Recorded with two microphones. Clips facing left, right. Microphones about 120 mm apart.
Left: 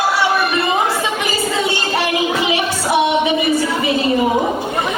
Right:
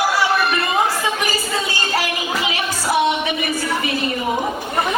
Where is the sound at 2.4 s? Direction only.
25° left (ahead or behind).